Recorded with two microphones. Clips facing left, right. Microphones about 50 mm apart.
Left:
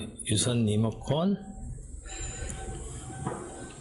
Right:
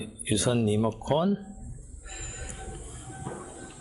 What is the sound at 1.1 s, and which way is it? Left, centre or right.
Speech, centre.